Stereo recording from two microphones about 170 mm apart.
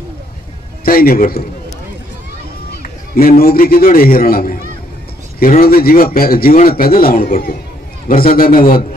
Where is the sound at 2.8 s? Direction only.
60° left (ahead or behind).